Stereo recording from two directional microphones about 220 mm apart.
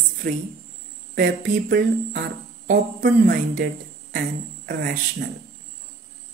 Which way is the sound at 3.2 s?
50° right (ahead or behind).